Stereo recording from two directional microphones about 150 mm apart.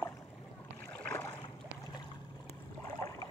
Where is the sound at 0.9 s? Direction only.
15° left (ahead or behind).